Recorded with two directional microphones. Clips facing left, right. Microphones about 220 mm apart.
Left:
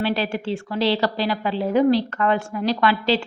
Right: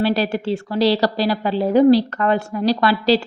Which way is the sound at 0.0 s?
40° right (ahead or behind).